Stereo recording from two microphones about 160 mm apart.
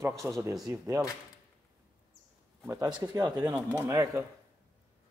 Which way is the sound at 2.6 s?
20° right (ahead or behind).